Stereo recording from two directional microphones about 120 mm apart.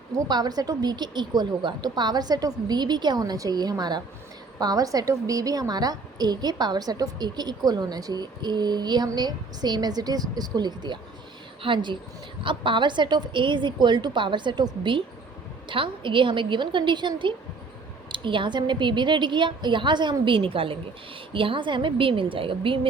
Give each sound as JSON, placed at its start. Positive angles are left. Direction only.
{"t": 0.3, "sound": "a woman's voice", "side_deg": -35}